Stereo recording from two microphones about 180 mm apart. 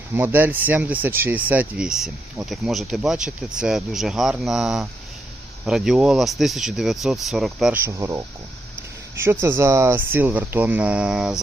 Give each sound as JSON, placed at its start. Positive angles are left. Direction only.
{"t": 0.1, "sound": "speech", "side_deg": -10}
{"t": 7.9, "sound": "speech", "side_deg": -15}